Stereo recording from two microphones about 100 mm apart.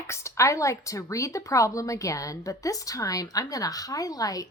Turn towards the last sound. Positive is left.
turn(degrees=35)  # may be behind; listen again after turning